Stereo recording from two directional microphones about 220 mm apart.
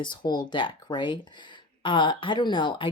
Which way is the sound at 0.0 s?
20° left (ahead or behind).